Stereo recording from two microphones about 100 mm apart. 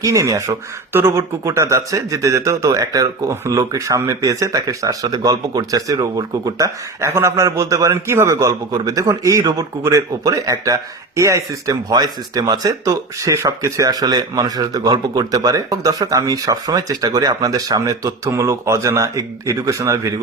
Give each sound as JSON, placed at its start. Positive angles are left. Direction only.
{"t": 0.0, "sound": "speech", "side_deg": -35}